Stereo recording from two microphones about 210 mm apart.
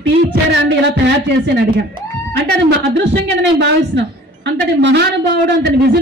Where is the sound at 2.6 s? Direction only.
55° right (ahead or behind).